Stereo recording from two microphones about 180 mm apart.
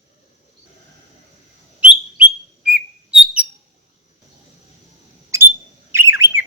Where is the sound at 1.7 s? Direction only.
5° right (ahead or behind).